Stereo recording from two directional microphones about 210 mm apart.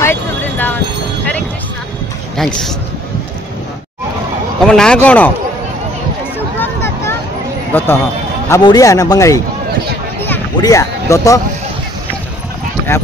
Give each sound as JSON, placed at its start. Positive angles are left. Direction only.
{"t": 0.0, "sound": "vehicle", "side_deg": 10}
{"t": 2.3, "sound": "speech", "side_deg": 0}
{"t": 4.6, "sound": "speech", "side_deg": 5}
{"t": 6.6, "sound": "a sound", "side_deg": 10}
{"t": 7.7, "sound": "a man's voice", "side_deg": 10}